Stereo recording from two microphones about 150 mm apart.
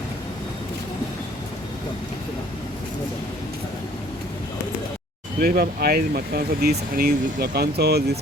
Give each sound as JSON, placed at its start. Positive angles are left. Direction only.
{"t": 5.4, "sound": "speech", "side_deg": -90}